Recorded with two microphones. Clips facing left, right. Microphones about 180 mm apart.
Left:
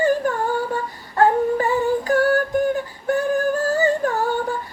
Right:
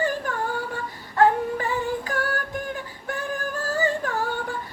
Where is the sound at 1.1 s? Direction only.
40° left (ahead or behind).